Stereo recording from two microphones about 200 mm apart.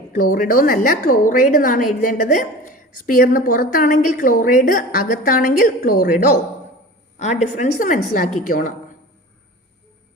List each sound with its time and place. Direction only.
0.1 s a woman's voice: 45° left (ahead or behind)